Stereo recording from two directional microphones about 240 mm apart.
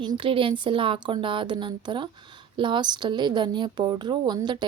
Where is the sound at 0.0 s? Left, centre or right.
Right.